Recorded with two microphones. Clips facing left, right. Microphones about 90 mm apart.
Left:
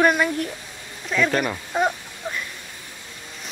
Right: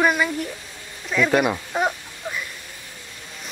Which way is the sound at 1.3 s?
10° right (ahead or behind).